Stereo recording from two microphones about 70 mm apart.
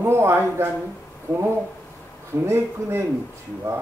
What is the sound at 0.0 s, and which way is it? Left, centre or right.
A man's voice, right.